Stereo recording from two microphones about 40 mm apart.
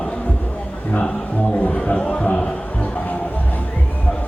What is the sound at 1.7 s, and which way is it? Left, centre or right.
Music, left.